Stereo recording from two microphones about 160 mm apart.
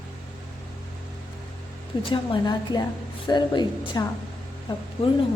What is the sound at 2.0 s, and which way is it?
A woman's voice, 30° left (ahead or behind).